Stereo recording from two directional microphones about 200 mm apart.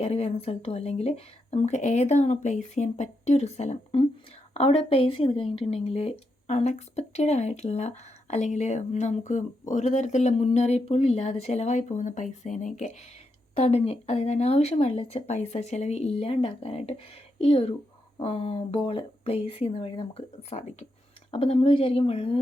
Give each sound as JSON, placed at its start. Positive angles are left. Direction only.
{"t": 0.0, "sound": "speech", "side_deg": 30}